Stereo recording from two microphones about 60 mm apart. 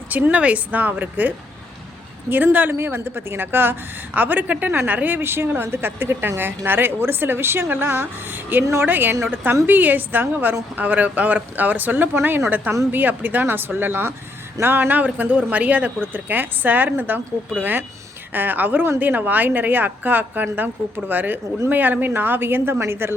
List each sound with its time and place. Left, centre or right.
0.1 s speech: right
2.3 s speech: right
2.7 s a woman's voice: right
8.6 s a woman's voice: right
8.9 s a woman's voice: right